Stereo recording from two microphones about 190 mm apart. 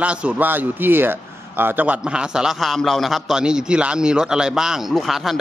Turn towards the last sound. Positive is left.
turn(degrees=0)  # may be behind; listen again after turning